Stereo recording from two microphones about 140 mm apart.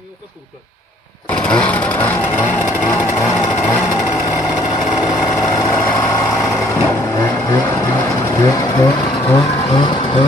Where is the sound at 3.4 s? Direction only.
15° left (ahead or behind).